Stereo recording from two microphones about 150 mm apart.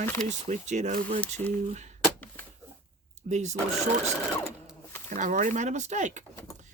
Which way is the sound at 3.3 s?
50° right (ahead or behind).